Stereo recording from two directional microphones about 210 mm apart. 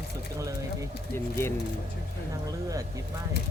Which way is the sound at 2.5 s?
15° right (ahead or behind).